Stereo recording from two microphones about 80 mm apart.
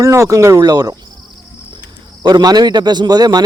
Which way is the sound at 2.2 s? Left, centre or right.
Right.